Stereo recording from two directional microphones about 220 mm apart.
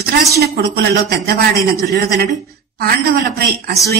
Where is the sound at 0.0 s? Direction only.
45° right (ahead or behind).